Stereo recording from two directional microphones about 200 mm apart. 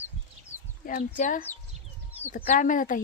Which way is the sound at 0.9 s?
40° left (ahead or behind).